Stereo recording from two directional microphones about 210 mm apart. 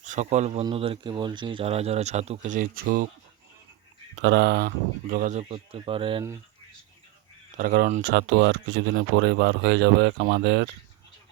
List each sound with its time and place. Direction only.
0.0 s a man's voice: 35° right (ahead or behind)
4.2 s speech: 50° right (ahead or behind); by 6.2 s 25° right (ahead or behind)
7.5 s speech: 45° right (ahead or behind)
8.0 s speech: 55° right (ahead or behind)